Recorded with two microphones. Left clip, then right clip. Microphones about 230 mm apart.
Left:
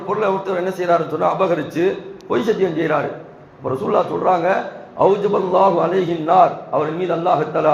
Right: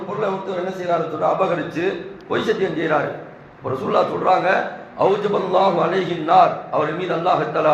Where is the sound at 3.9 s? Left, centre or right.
Left.